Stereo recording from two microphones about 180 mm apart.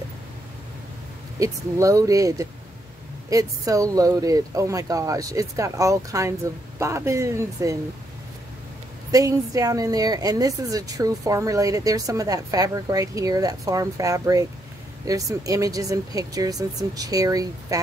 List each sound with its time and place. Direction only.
1.4 s speech: 20° right (ahead or behind)
9.1 s speech: 20° right (ahead or behind)